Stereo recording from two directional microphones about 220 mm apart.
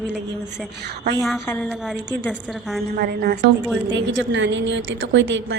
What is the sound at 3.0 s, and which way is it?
A woman's voice, 45° right (ahead or behind).